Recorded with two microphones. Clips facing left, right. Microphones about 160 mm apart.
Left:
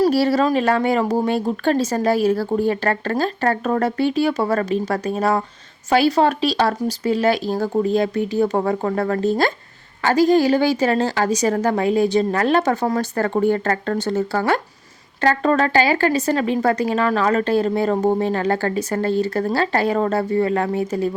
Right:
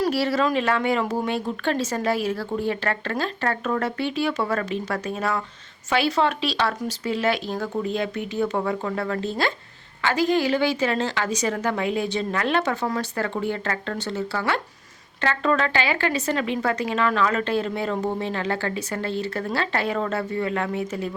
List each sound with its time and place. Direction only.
0.0 s speech: 40° left (ahead or behind)